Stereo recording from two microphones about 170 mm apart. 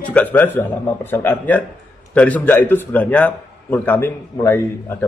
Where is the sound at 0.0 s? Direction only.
10° left (ahead or behind).